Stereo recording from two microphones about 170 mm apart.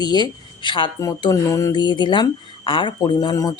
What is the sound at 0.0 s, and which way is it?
Speech, 25° left (ahead or behind).